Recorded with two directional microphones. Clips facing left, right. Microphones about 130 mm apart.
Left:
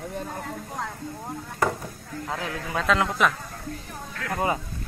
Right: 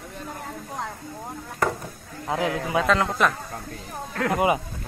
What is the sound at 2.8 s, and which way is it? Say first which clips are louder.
Speech: left 1 dB; centre (ahead or behind).